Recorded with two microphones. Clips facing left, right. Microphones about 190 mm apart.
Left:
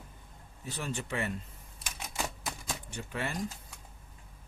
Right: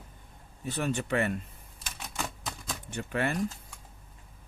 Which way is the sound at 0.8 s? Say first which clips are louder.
Right 6 dB; 60° right (ahead or behind).